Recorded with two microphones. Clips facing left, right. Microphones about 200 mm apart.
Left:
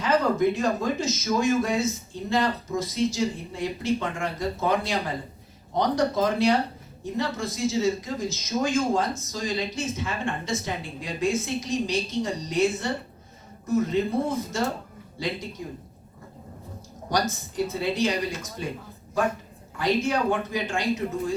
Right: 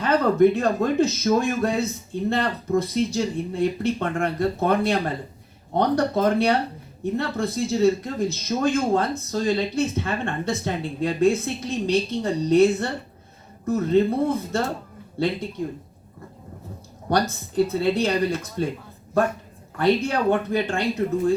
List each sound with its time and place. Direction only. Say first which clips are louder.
0.0 s speech: right 5 dB; 60° right (ahead or behind)
17.1 s speech: right 4 dB; 60° right (ahead or behind)
19.8 s speech: right 4 dB; 60° right (ahead or behind)